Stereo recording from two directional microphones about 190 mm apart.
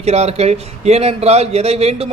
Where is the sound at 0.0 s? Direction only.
35° right (ahead or behind).